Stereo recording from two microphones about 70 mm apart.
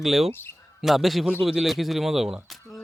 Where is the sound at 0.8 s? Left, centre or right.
Centre.